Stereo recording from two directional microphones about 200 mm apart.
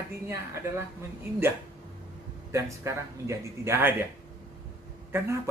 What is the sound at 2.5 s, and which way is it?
Speech, 15° right (ahead or behind).